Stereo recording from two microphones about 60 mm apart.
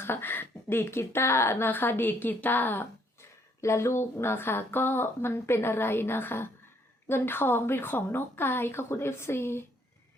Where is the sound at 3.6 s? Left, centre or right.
Left.